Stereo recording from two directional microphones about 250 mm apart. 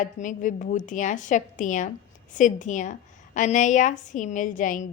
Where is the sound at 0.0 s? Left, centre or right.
Left.